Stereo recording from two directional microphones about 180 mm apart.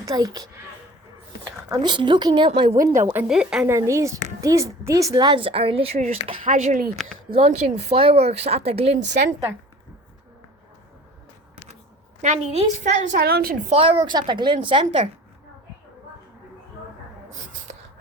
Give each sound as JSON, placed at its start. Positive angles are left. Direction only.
{"t": 0.0, "sound": "speech", "side_deg": -20}
{"t": 1.7, "sound": "a woman's voice", "side_deg": -25}
{"t": 3.8, "sound": "a woman's voice", "side_deg": -15}
{"t": 6.4, "sound": "speech", "side_deg": -45}
{"t": 7.3, "sound": "speech", "side_deg": -35}
{"t": 12.2, "sound": "speech", "side_deg": -40}
{"t": 13.1, "sound": "a woman's voice", "side_deg": -60}
{"t": 13.7, "sound": "a woman's voice", "side_deg": -30}